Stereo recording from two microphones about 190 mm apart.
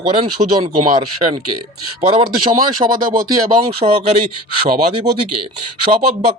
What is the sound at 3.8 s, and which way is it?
Speech, 30° right (ahead or behind).